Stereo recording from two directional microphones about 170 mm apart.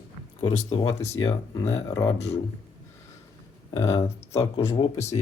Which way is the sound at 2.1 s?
35° left (ahead or behind).